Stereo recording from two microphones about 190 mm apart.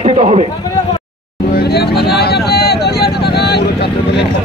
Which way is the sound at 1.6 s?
55° left (ahead or behind).